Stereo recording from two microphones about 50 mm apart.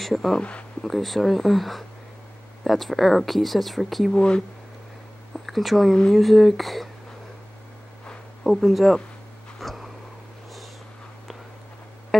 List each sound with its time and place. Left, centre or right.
0.0 s speech: centre
0.4 s speech: left
0.8 s speech: centre
4.1 s speech: centre
5.3 s a sound: centre
6.1 s speech: centre
8.5 s speech: centre
9.6 s a sound: centre